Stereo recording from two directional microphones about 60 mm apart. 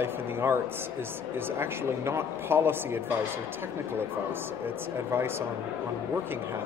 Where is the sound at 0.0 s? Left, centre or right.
Right.